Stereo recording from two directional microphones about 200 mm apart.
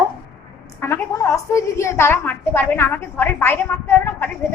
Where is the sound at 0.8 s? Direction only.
15° left (ahead or behind).